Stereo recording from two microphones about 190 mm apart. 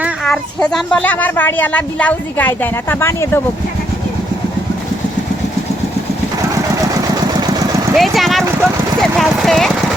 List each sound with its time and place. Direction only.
0.3 s speech: 5° left (ahead or behind)
7.3 s engine: 20° right (ahead or behind)
7.9 s speech: centre (ahead or behind)